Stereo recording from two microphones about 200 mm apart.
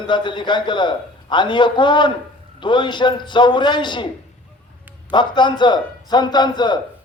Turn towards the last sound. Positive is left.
turn(degrees=20)  # may be behind; listen again after turning